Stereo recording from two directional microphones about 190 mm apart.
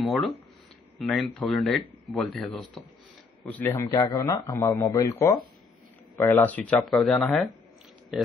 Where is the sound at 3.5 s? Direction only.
10° left (ahead or behind).